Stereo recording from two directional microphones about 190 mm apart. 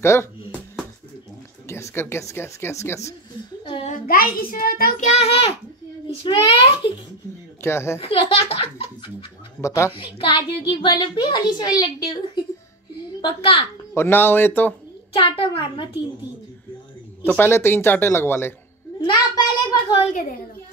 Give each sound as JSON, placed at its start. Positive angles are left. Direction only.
{"t": 0.0, "sound": "speech", "side_deg": 15}
{"t": 1.7, "sound": "speech", "side_deg": 15}
{"t": 3.6, "sound": "a sound", "side_deg": 25}
{"t": 4.1, "sound": "a child's voice", "side_deg": 50}
{"t": 5.1, "sound": "a child's voice", "side_deg": 30}
{"t": 7.6, "sound": "speech", "side_deg": 15}
{"t": 8.0, "sound": "a child's voice", "side_deg": 30}
{"t": 9.6, "sound": "speech", "side_deg": 15}
{"t": 10.1, "sound": "a woman's voice", "side_deg": 25}
{"t": 13.2, "sound": "a woman's voice", "side_deg": 25}
{"t": 13.9, "sound": "speech", "side_deg": 10}
{"t": 15.1, "sound": "a woman's voice", "side_deg": 25}
{"t": 17.2, "sound": "speech", "side_deg": 10}
{"t": 18.9, "sound": "a sound", "side_deg": 20}